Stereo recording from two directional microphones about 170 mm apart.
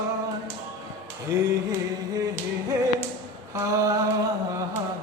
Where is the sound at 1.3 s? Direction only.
15° right (ahead or behind).